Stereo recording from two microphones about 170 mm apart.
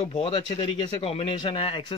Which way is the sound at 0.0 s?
35° left (ahead or behind).